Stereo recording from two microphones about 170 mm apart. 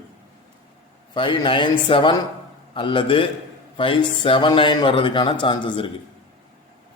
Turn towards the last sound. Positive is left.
turn(degrees=30)  # may be behind; listen again after turning